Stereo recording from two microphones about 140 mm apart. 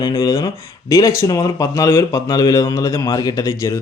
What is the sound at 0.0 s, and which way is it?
A man's voice, 30° left (ahead or behind).